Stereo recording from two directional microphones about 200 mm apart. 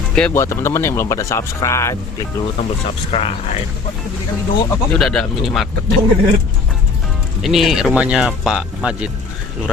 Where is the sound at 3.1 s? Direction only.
30° left (ahead or behind).